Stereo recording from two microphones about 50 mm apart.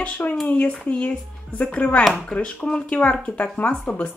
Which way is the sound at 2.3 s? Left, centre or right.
Centre.